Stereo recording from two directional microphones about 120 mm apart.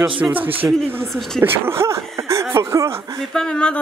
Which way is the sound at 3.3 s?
5° left (ahead or behind).